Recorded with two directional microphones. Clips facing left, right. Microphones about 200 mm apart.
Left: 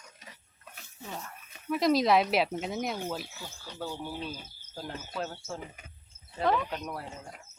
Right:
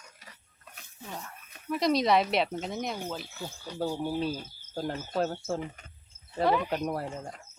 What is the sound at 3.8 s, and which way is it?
Speech, 30° right (ahead or behind).